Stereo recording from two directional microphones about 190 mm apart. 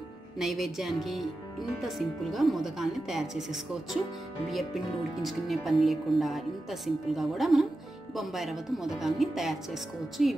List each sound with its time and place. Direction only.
0.4 s speech: centre (ahead or behind)
5.2 s speech: centre (ahead or behind)